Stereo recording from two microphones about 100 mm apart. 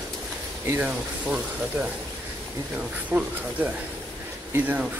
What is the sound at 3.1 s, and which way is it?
Speech, 20° right (ahead or behind).